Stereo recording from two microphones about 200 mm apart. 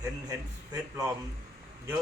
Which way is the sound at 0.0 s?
15° right (ahead or behind).